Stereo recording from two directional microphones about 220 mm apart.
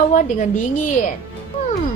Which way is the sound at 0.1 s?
35° left (ahead or behind).